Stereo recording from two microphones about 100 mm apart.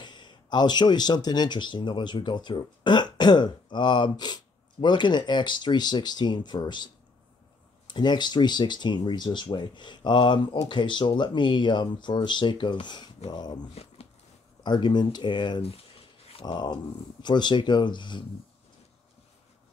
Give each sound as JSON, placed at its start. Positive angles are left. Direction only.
{"t": 0.0, "sound": "speech", "side_deg": 50}
{"t": 16.3, "sound": "a sound", "side_deg": 70}
{"t": 16.5, "sound": "speech", "side_deg": 45}